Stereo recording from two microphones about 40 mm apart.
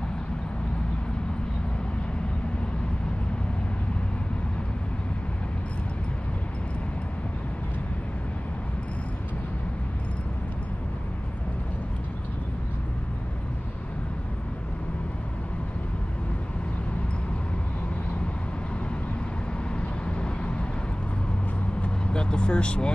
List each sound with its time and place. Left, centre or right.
19.7 s vehicle: left
21.8 s vehicle: left